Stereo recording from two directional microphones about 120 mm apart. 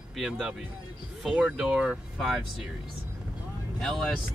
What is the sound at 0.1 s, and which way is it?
Speech, 5° right (ahead or behind).